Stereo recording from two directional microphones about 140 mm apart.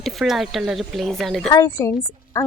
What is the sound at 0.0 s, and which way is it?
Speech, centre (ahead or behind).